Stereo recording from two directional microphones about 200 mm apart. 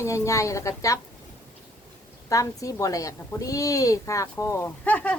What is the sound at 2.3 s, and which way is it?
A woman's voice, 15° left (ahead or behind).